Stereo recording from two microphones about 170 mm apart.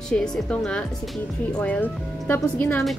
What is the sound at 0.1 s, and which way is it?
A woman's voice, 5° left (ahead or behind).